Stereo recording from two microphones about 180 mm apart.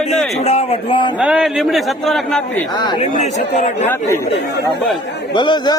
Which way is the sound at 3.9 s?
15° left (ahead or behind).